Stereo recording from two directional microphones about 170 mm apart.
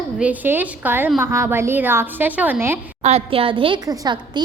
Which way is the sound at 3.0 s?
35° right (ahead or behind).